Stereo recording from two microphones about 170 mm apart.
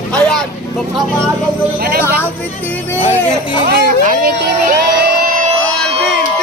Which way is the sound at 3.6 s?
65° right (ahead or behind).